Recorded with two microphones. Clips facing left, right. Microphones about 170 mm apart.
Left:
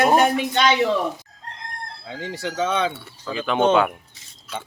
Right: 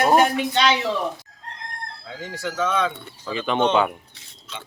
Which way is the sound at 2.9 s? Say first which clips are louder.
Even; 5° left (ahead or behind).